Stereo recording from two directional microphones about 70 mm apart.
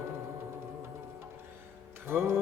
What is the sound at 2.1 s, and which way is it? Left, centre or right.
Music, right.